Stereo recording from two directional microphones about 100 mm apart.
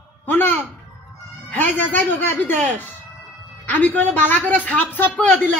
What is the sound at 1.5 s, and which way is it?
A woman's voice, 20° left (ahead or behind).